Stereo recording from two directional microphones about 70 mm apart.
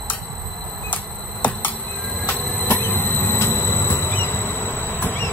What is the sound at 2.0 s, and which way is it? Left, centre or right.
Train, left.